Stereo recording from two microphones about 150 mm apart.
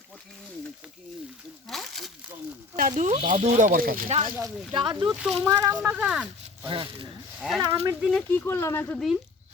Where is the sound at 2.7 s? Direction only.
60° right (ahead or behind).